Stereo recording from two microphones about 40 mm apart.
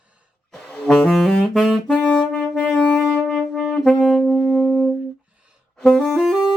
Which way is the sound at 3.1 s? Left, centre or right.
Centre.